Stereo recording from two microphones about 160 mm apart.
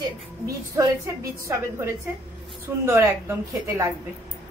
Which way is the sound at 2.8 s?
15° right (ahead or behind).